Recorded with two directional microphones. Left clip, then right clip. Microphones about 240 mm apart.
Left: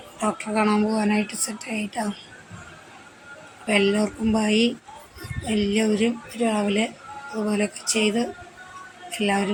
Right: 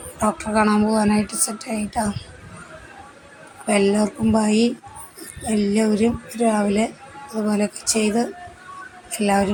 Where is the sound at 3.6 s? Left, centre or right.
Centre.